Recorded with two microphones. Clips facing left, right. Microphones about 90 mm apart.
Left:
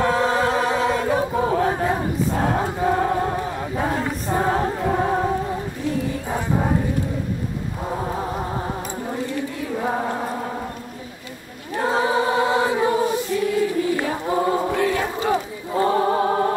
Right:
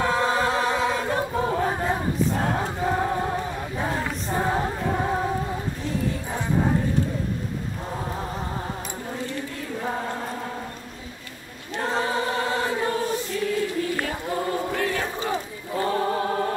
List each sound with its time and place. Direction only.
0.0 s choir: 5° left (ahead or behind)
9.8 s mantra: 20° left (ahead or behind)
11.7 s choir: 15° left (ahead or behind); by 16.5 s 30° left (ahead or behind)